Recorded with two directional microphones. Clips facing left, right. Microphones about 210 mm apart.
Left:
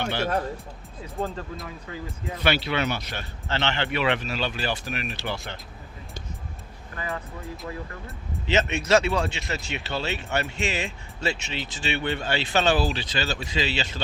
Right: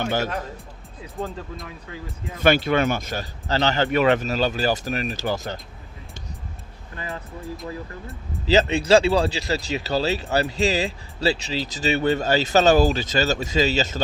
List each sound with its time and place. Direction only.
0.0 s speech: 45° right (ahead or behind)
1.1 s speech: centre (ahead or behind)
2.4 s a man's voice: 50° right (ahead or behind)
6.9 s speech: 30° right (ahead or behind)
8.4 s speech: 35° right (ahead or behind)